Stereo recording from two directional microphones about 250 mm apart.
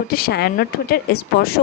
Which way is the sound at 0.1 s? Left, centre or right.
Left.